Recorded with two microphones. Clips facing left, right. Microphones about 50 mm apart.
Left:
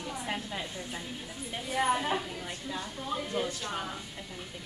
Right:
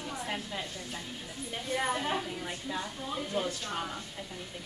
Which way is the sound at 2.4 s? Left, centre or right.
Centre.